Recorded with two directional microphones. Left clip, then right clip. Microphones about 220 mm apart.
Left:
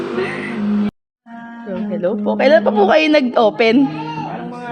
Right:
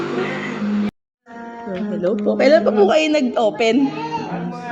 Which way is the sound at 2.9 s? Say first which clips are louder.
Left 4 dB; 25° left (ahead or behind).